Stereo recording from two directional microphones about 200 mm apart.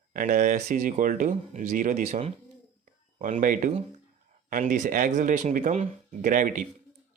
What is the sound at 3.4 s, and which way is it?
Speech, 40° right (ahead or behind).